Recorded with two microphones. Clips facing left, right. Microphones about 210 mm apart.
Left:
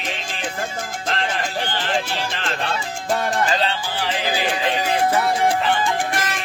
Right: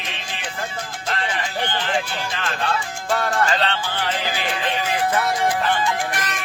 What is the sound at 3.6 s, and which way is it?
Music, 10° left (ahead or behind).